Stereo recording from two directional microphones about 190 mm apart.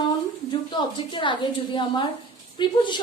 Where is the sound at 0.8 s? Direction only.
25° left (ahead or behind).